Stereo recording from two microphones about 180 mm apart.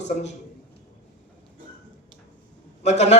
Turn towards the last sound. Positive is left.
turn(degrees=40)  # may be behind; listen again after turning